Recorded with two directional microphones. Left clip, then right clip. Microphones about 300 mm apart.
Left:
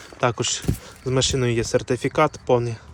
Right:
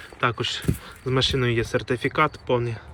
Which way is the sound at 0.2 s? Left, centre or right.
Centre.